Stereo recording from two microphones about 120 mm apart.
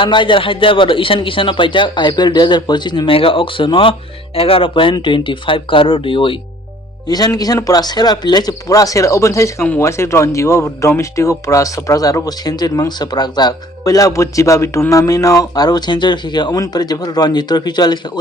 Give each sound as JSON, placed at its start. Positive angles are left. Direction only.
{"t": 0.0, "sound": "a man's voice", "side_deg": 45}
{"t": 7.1, "sound": "speech", "side_deg": 35}